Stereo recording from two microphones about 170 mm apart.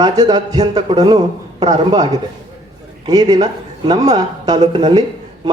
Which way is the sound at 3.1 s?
25° right (ahead or behind).